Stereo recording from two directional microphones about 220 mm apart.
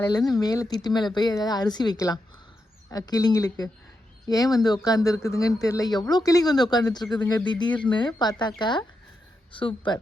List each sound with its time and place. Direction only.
0.0 s speech: 15° left (ahead or behind)